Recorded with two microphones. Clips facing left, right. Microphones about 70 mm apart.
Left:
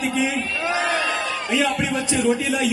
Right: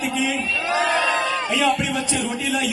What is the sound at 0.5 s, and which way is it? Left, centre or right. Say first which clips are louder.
Chant: right 1 dB; left.